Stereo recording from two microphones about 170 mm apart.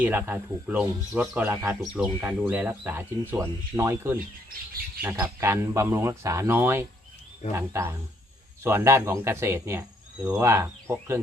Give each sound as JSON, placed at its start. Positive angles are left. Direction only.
{"t": 0.0, "sound": "speech", "side_deg": -10}